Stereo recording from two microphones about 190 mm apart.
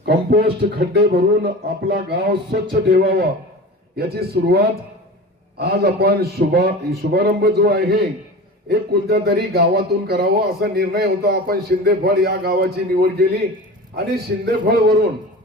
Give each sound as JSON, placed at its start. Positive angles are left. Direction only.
{"t": 0.0, "sound": "speech", "side_deg": -55}